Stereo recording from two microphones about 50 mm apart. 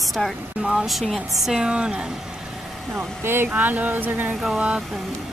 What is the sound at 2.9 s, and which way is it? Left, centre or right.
Speech, right.